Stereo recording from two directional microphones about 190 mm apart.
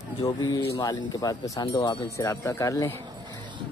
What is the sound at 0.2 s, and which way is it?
Speech, 20° left (ahead or behind).